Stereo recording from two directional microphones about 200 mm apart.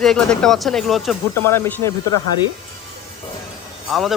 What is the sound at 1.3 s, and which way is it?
Speech, 10° left (ahead or behind).